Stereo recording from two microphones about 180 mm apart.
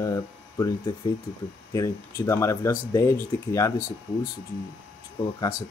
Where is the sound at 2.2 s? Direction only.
15° left (ahead or behind).